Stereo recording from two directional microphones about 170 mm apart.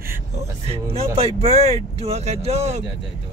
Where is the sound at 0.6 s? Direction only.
35° right (ahead or behind).